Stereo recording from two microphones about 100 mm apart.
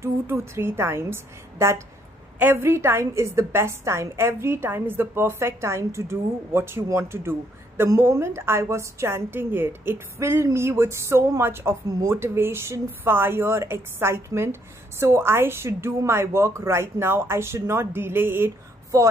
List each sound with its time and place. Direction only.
0.0 s a woman's voice: 25° right (ahead or behind)